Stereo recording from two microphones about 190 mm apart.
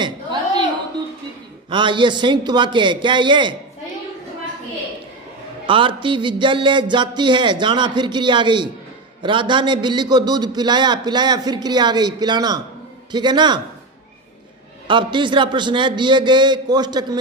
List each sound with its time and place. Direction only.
1.7 s a man's voice: 25° right (ahead or behind)
5.6 s a man's voice: 25° right (ahead or behind)
14.8 s a man's voice: 25° right (ahead or behind)